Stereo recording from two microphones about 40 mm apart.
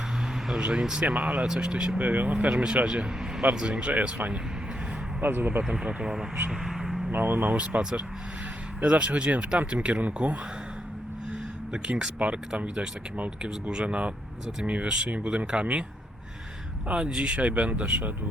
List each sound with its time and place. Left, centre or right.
0.6 s speech: right
2.0 s speech: right
2.6 s speech: right
3.8 s speech: right
5.8 s speech: right
6.5 s vehicle: centre
7.1 s speech: right
7.5 s speech: right
12.2 s speech: right
13.8 s speech: right
16.9 s speech: right